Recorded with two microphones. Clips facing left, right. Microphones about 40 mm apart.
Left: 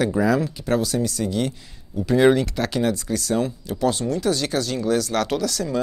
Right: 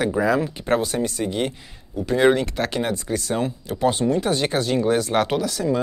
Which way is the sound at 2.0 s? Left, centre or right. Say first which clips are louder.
Left 1 dB; centre.